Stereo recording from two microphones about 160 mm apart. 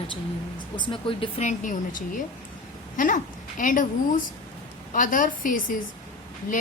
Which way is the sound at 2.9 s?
55° left (ahead or behind).